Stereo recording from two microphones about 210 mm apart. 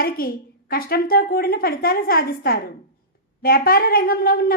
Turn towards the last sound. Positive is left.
turn(degrees=45)  # may be behind; listen again after turning